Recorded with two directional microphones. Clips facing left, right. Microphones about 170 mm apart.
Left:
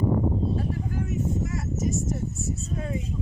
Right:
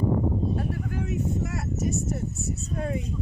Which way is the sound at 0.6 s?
65° right (ahead or behind).